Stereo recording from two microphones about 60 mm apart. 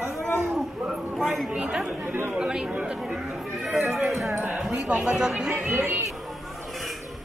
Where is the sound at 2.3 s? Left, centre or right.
Centre.